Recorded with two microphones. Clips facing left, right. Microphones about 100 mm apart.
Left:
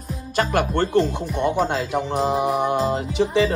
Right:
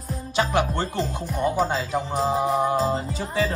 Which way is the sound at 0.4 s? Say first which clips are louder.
Left 1 dB; 50° left (ahead or behind).